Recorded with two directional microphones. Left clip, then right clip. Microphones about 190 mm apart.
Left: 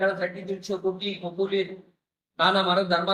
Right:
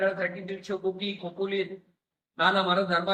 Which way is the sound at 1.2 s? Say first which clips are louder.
Left 3 dB; 30° right (ahead or behind).